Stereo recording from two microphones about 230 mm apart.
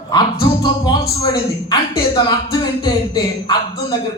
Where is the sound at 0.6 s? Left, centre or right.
Centre.